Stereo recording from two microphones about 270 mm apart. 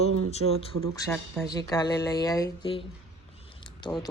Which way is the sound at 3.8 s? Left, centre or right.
Centre.